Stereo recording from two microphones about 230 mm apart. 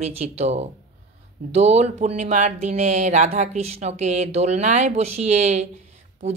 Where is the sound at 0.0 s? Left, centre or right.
Right.